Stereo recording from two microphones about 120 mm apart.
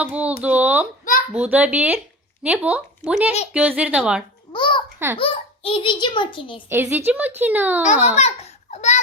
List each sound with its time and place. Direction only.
0.0 s a woman's voice: 10° right (ahead or behind)
4.5 s a child's voice: 40° left (ahead or behind)
6.7 s a woman's voice: 20° right (ahead or behind)
8.0 s a child's voice: 65° left (ahead or behind)